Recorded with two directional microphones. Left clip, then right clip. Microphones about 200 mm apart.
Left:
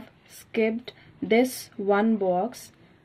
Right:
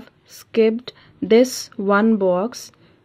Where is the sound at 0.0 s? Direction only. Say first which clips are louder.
Right 5 dB; 50° right (ahead or behind).